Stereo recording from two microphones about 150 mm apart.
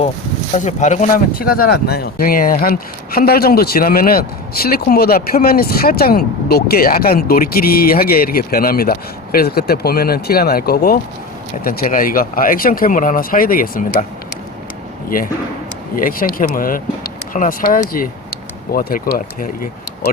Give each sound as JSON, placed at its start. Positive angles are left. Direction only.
{"t": 0.5, "sound": "speech", "side_deg": 55}
{"t": 11.6, "sound": "speech", "side_deg": 70}
{"t": 16.0, "sound": "speech", "side_deg": 70}